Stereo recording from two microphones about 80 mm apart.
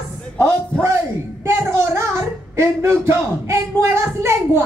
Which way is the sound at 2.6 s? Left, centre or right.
Right.